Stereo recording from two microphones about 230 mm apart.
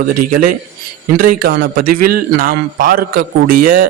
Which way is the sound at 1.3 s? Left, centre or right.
Right.